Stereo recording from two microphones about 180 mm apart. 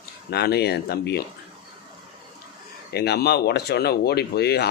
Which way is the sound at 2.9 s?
65° left (ahead or behind).